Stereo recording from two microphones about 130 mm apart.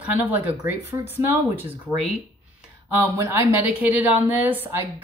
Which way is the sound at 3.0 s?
20° right (ahead or behind).